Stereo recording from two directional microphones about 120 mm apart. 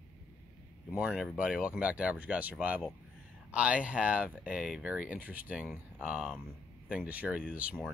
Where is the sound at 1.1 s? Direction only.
5° right (ahead or behind).